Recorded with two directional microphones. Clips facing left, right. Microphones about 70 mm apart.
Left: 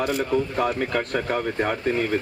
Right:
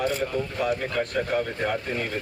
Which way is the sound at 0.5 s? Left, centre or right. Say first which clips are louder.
Left 2 dB; left.